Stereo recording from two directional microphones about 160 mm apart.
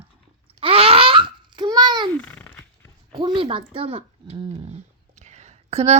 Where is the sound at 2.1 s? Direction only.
10° left (ahead or behind).